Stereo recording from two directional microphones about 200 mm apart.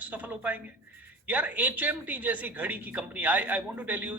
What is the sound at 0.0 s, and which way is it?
A man's voice, 10° right (ahead or behind).